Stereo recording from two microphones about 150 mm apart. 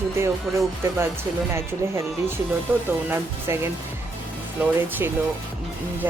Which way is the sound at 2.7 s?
15° right (ahead or behind).